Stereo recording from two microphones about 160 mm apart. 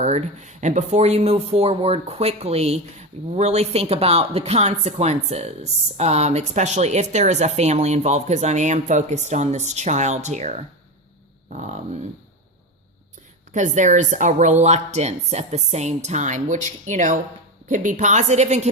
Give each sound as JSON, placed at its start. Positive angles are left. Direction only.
{"t": 0.0, "sound": "speech", "side_deg": -45}
{"t": 13.5, "sound": "speech", "side_deg": -50}